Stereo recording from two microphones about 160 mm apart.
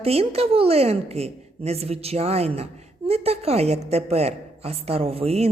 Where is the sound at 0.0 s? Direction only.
40° right (ahead or behind).